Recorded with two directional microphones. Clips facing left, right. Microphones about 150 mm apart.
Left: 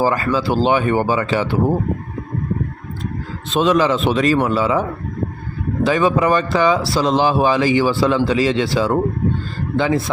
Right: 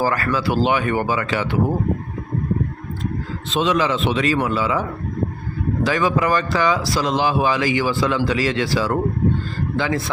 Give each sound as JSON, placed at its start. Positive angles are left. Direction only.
{"t": 0.0, "sound": "speech", "side_deg": 20}
{"t": 3.5, "sound": "a man's voice", "side_deg": 45}